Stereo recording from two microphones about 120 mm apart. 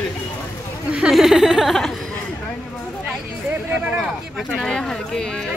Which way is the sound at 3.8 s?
5° right (ahead or behind).